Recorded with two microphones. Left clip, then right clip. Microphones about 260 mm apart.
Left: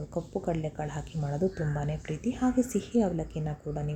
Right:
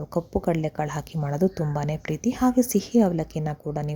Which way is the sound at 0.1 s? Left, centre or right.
Right.